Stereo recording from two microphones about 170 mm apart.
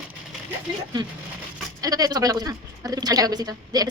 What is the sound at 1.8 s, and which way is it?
A woman's voice, 20° right (ahead or behind).